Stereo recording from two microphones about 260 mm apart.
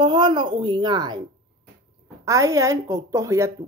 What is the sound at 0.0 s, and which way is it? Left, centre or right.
Speech, centre.